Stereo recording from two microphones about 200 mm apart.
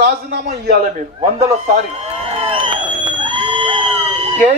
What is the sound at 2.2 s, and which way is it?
Crowd, 30° right (ahead or behind).